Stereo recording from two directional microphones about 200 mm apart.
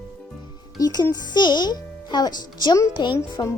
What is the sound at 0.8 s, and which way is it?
A child's voice, 20° left (ahead or behind).